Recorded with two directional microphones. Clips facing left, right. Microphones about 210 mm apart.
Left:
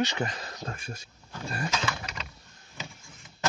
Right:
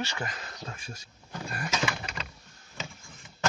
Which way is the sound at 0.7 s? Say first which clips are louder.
Left 3 dB; 55° left (ahead or behind).